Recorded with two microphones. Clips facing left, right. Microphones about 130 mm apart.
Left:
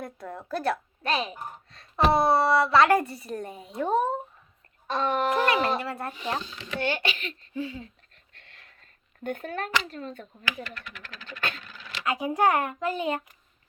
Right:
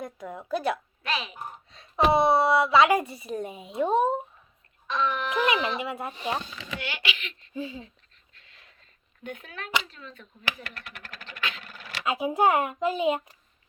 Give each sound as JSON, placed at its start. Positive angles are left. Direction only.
{"t": 0.0, "sound": "a woman's voice", "side_deg": 0}
{"t": 1.0, "sound": "a child's voice", "side_deg": 40}
{"t": 1.7, "sound": "a woman's voice", "side_deg": 0}
{"t": 4.9, "sound": "a child's voice", "side_deg": 50}
{"t": 5.8, "sound": "a woman's voice", "side_deg": -5}
{"t": 6.7, "sound": "a child's voice", "side_deg": 40}
{"t": 7.5, "sound": "speech", "side_deg": -20}
{"t": 8.3, "sound": "a sound", "side_deg": 60}
{"t": 9.8, "sound": "a child's voice", "side_deg": 45}
{"t": 11.3, "sound": "scratch", "side_deg": 45}
{"t": 12.0, "sound": "speech", "side_deg": -20}